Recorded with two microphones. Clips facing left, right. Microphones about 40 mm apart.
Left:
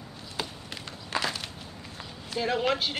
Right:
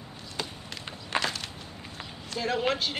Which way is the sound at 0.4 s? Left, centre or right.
Centre.